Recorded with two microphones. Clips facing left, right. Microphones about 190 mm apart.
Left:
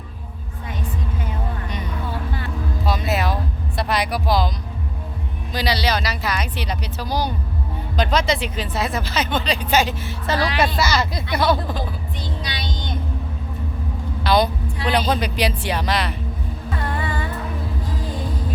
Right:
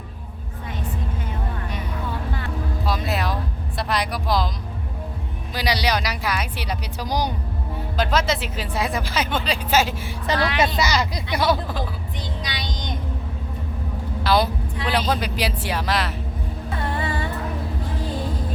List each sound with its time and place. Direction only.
2.8 s a sound: centre (ahead or behind)
3.8 s speech: centre (ahead or behind)
5.5 s speech: 15° right (ahead or behind)
7.9 s speech: 5° right (ahead or behind)
14.3 s vehicle: 5° right (ahead or behind)
15.1 s speech: 5° right (ahead or behind)